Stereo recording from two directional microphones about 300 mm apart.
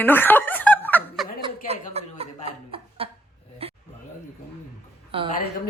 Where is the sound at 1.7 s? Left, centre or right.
Centre.